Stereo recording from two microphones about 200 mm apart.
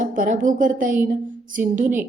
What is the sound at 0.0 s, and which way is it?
A woman's voice, 40° right (ahead or behind).